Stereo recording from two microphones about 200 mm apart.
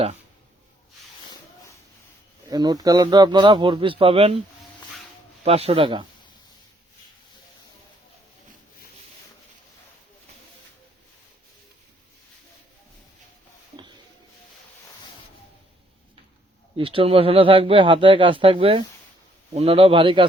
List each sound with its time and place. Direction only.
2.5 s a man's voice: 20° right (ahead or behind)
5.5 s a man's voice: 30° right (ahead or behind)
16.7 s a man's voice: 25° right (ahead or behind)